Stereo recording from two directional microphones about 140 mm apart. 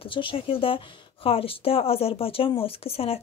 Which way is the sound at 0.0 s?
40° left (ahead or behind).